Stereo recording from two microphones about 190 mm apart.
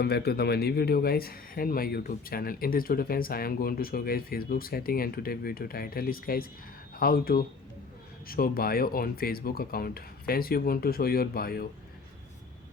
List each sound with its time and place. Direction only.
0.0 s speech: 60° left (ahead or behind)